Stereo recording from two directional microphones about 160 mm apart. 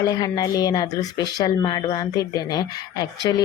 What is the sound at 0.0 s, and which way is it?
Speech, 25° left (ahead or behind).